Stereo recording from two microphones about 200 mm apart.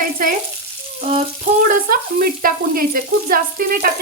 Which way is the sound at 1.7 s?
45° right (ahead or behind).